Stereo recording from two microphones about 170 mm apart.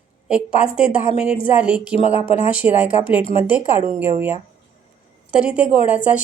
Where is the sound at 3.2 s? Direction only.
30° left (ahead or behind).